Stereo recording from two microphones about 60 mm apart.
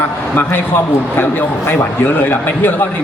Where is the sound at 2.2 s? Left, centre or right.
Left.